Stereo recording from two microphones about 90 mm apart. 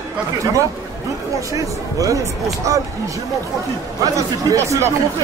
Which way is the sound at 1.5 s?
40° right (ahead or behind).